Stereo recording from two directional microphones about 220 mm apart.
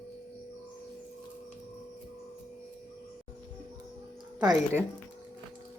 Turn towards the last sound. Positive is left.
turn(degrees=-10)  # may be behind; listen again after turning